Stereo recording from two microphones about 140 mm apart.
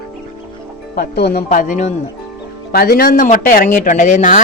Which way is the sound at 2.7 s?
90° left.